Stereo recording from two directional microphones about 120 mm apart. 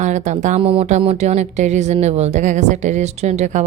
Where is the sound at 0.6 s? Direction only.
50° right (ahead or behind).